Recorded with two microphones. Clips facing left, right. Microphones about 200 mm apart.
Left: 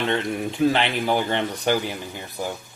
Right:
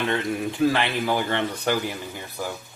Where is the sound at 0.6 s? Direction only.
20° left (ahead or behind).